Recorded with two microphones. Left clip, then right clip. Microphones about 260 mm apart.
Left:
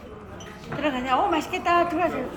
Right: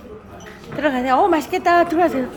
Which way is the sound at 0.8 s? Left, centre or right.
Centre.